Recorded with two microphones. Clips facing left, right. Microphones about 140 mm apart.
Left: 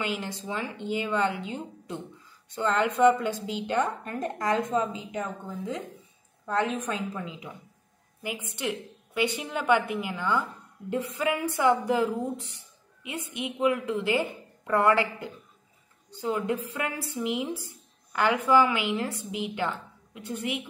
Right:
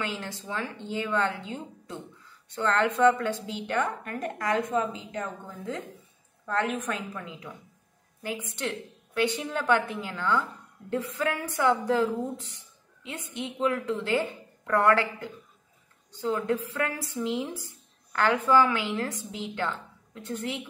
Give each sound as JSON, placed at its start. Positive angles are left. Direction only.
{"t": 0.0, "sound": "a woman's voice", "side_deg": 15}